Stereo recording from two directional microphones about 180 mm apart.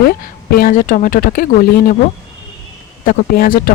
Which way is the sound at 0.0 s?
55° left (ahead or behind).